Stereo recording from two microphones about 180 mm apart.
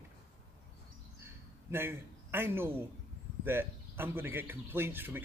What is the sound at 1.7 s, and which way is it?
Speech, 10° right (ahead or behind).